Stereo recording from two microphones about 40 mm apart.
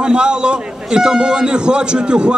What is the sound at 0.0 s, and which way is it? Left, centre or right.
A man's voice, right.